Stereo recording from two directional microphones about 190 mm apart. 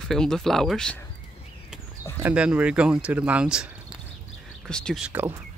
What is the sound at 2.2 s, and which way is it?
Speech, 5° right (ahead or behind).